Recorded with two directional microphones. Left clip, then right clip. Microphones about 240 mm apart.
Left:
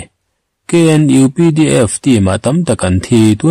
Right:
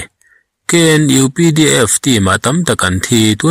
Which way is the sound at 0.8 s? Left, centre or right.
Centre.